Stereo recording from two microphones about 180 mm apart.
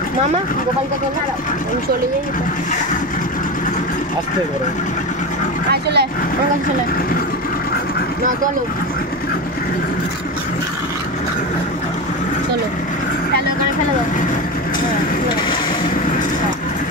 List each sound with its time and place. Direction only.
5.7 s speech: 65° right (ahead or behind)